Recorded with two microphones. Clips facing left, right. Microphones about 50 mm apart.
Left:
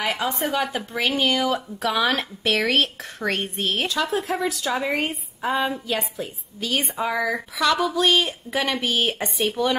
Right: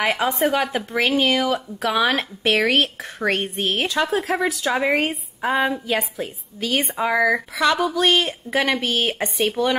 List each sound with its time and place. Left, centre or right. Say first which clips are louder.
0.1 s a woman's voice: right 4 dB; centre
2.4 s a woman's voice: right 3 dB; centre
4.6 s a woman's voice: right 5 dB; right; by 8.3 s centre
8.3 s a woman's voice: right 4 dB; centre
8.7 s a woman's voice: right 1 dB; centre